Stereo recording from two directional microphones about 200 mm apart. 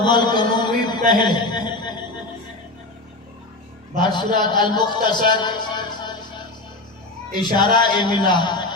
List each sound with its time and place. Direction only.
0.0 s a sound: 20° left (ahead or behind)
1.1 s a man's voice: 20° left (ahead or behind)
3.9 s a man's voice: 20° left (ahead or behind)
7.6 s a man's voice: 20° left (ahead or behind)